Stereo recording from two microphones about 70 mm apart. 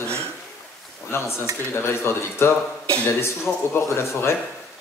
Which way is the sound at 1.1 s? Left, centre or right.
Left.